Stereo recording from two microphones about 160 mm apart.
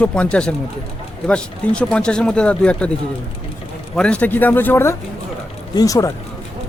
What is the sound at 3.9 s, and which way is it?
Speech, 5° left (ahead or behind).